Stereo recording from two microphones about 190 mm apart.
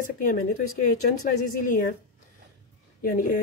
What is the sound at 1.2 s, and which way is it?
Speech, 45° left (ahead or behind).